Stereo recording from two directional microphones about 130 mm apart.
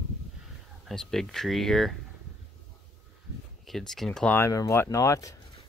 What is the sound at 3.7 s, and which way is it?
Speech, centre (ahead or behind).